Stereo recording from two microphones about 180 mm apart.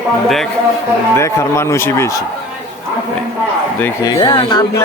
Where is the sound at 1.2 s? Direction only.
15° left (ahead or behind).